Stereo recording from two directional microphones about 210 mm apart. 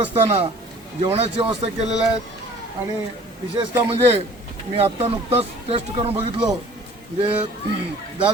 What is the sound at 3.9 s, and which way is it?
Speech, 30° right (ahead or behind).